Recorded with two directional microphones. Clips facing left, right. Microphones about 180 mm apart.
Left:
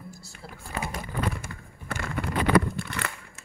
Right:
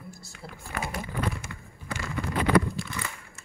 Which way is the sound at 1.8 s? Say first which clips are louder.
Left 1 dB; 65° left (ahead or behind).